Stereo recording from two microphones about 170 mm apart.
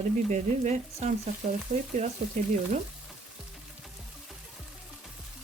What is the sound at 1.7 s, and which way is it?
Speech, 55° right (ahead or behind).